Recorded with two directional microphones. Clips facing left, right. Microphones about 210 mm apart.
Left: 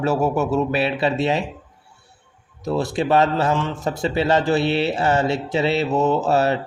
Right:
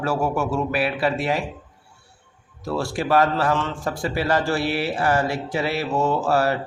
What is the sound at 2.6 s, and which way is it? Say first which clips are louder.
A man's voice: left 3 dB; 20° left (ahead or behind).